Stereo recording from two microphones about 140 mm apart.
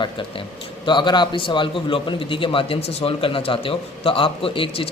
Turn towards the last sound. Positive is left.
turn(degrees=40)  # may be behind; listen again after turning